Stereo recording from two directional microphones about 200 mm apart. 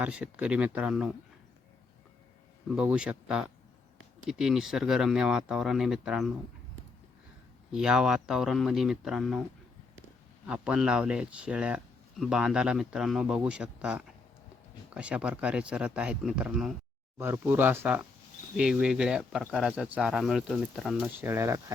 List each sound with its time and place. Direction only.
0.0 s speech: 5° right (ahead or behind)
2.6 s speech: 5° right (ahead or behind)
7.7 s speech: 5° right (ahead or behind)
10.4 s speech: 5° right (ahead or behind)